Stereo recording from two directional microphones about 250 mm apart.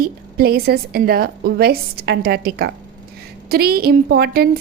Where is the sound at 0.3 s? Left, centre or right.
Right.